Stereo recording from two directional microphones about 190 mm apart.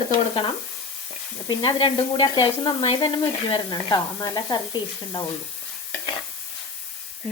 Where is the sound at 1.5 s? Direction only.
25° left (ahead or behind).